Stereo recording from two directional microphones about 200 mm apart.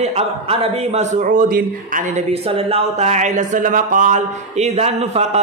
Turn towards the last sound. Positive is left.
turn(degrees=-35)  # may be behind; listen again after turning